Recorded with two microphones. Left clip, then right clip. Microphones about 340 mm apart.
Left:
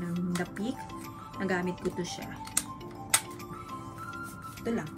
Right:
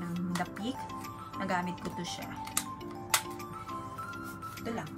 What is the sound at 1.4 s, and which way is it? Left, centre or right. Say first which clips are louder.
Speech: left 1 dB; right.